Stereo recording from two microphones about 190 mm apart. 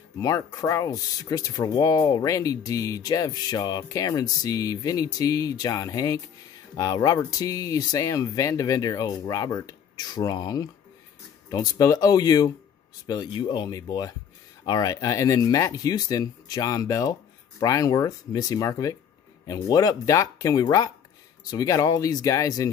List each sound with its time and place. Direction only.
0.2 s speech: 20° left (ahead or behind)